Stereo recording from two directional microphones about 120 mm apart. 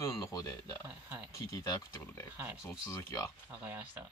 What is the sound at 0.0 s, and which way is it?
Speech, 25° left (ahead or behind).